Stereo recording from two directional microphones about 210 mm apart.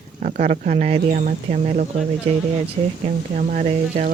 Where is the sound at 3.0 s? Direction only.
35° right (ahead or behind).